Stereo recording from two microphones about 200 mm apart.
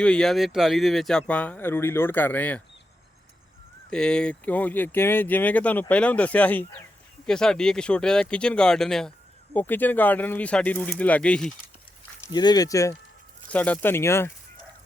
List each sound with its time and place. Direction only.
0.0 s speech: 5° left (ahead or behind)
3.8 s speech: 5° left (ahead or behind)
12.3 s speech: 20° left (ahead or behind)